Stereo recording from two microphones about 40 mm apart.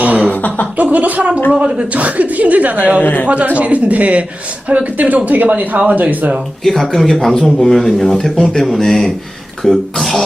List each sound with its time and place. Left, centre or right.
0.0 s chuckle: right
0.3 s chuckle: left
0.8 s a sound: right
1.5 s a woman's voice: right
3.0 s speech: left
3.6 s a woman's voice: right
6.7 s speech: centre